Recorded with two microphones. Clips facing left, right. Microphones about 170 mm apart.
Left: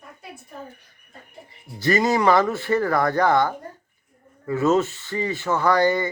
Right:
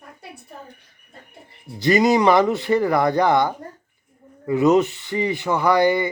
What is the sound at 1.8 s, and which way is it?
Speech, 15° right (ahead or behind).